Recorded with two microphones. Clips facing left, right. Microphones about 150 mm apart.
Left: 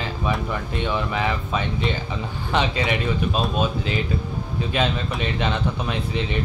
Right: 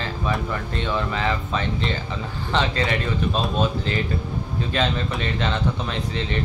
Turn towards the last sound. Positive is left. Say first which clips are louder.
# left 1 dB
turn(degrees=10)  # may be behind; listen again after turning